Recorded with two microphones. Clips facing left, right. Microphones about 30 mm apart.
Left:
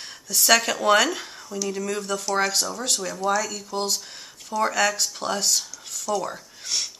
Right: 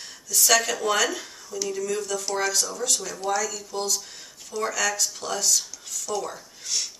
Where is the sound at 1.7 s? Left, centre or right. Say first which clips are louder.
Even; left.